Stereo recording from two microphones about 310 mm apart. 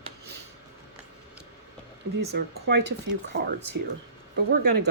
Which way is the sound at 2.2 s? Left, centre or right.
Right.